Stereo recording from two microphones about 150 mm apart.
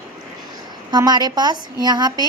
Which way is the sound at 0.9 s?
30° right (ahead or behind).